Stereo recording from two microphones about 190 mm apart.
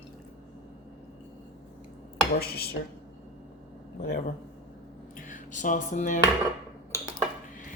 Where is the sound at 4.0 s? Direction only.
55° left (ahead or behind).